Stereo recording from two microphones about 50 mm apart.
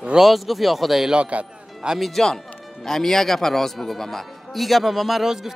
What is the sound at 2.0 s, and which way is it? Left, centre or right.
A man's voice, centre.